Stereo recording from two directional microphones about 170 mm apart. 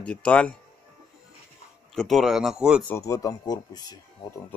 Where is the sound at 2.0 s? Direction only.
Centre (ahead or behind).